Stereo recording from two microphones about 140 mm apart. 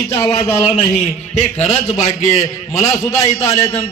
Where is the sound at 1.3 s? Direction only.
55° left (ahead or behind).